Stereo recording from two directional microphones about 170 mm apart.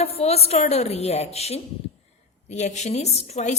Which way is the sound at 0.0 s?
35° left (ahead or behind).